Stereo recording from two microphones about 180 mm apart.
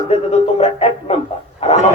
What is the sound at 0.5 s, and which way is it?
Speech, 35° left (ahead or behind).